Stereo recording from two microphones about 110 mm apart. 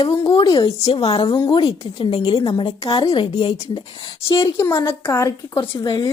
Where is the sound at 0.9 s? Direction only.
65° left (ahead or behind).